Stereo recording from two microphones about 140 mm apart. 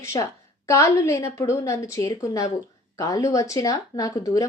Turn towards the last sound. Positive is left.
turn(degrees=25)  # may be behind; listen again after turning